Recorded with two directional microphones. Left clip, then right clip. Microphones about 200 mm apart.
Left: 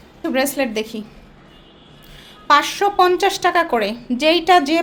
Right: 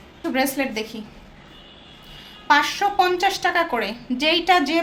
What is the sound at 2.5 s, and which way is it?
A woman's voice, 55° left (ahead or behind).